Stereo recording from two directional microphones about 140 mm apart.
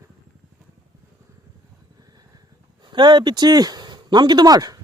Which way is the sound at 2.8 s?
35° right (ahead or behind).